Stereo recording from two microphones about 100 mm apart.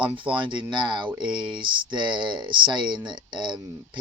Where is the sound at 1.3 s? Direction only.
50° right (ahead or behind).